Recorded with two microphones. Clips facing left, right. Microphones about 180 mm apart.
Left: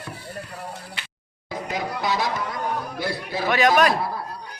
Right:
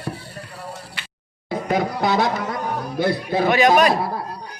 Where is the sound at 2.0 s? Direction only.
55° right (ahead or behind).